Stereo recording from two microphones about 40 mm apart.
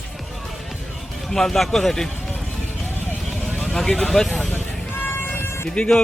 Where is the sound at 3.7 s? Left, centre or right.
Centre.